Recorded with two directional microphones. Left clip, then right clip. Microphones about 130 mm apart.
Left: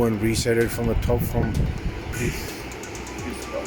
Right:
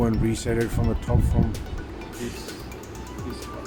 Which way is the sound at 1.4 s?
40° left (ahead or behind).